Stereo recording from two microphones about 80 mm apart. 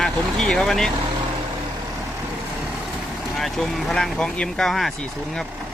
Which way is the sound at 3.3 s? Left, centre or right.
Centre.